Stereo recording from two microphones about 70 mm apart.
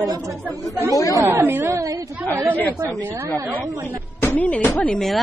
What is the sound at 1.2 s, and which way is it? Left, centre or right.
Speech, right.